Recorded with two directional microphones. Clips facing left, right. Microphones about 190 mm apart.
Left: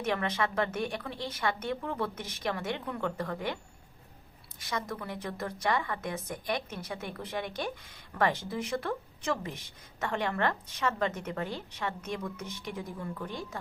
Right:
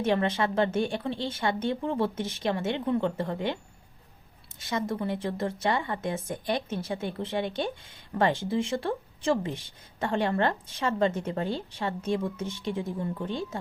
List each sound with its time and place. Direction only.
0.0 s speech: 30° right (ahead or behind)
4.6 s speech: 25° right (ahead or behind)